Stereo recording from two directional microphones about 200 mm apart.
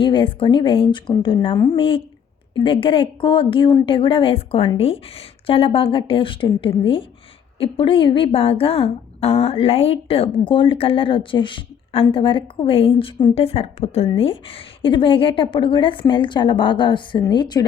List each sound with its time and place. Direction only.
0.0 s a woman's voice: 25° left (ahead or behind)